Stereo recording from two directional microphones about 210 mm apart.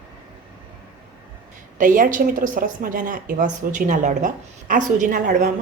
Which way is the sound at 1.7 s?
40° right (ahead or behind).